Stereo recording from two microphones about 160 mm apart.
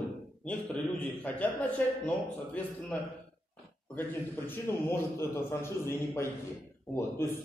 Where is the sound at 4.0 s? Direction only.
15° left (ahead or behind).